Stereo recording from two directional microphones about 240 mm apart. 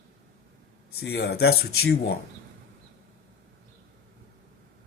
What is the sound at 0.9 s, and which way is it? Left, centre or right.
Speech, left.